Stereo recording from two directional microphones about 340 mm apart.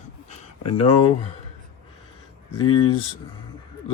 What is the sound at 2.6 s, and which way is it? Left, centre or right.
Speech, centre.